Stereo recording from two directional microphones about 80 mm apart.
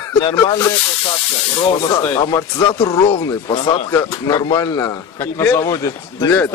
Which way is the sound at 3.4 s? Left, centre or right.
Left.